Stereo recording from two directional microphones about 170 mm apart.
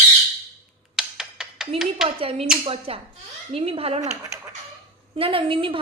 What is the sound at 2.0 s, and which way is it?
A woman's voice, 35° right (ahead or behind).